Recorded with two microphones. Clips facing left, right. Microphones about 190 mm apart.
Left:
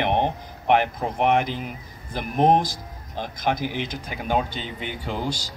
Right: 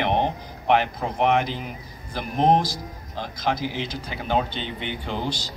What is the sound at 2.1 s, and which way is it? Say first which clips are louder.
Speech: left 1 dB; 15° left (ahead or behind).